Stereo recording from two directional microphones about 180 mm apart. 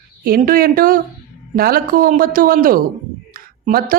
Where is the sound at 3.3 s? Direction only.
55° right (ahead or behind).